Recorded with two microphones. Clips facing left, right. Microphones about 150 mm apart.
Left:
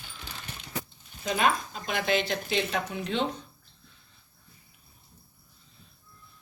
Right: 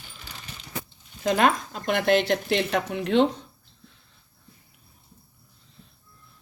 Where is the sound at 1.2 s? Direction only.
70° right (ahead or behind).